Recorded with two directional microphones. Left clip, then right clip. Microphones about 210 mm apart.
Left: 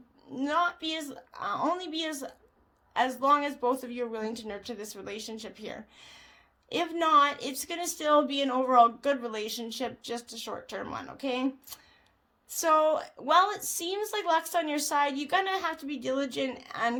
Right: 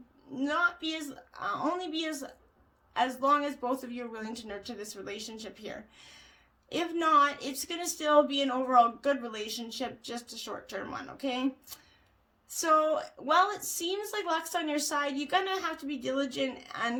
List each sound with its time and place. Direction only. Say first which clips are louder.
0.3 s speech: left 1 dB; 35° left (ahead or behind)